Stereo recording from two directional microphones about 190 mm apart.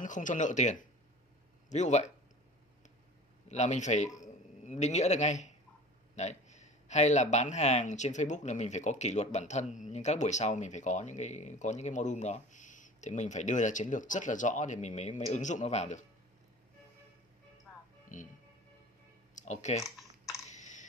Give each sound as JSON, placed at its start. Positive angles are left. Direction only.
{"t": 0.0, "sound": "speech", "side_deg": 40}
{"t": 3.4, "sound": "a man's voice", "side_deg": 35}
{"t": 18.0, "sound": "music", "side_deg": 45}
{"t": 19.3, "sound": "speech", "side_deg": 40}
{"t": 19.8, "sound": "typing", "side_deg": 0}
{"t": 20.4, "sound": "computer keyboard", "side_deg": 40}